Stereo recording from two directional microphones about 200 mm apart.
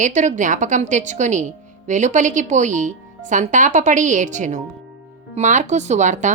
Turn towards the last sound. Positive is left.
turn(degrees=-40)  # may be behind; listen again after turning